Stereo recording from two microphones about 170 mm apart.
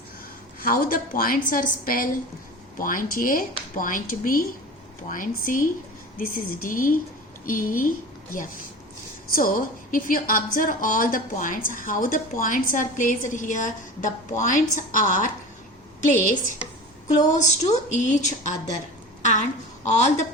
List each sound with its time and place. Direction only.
0.6 s a woman's voice: 55° left (ahead or behind)
19.8 s a woman's voice: 45° left (ahead or behind)